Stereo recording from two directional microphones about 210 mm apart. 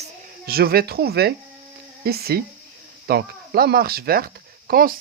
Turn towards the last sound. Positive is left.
turn(degrees=-45)  # may be behind; listen again after turning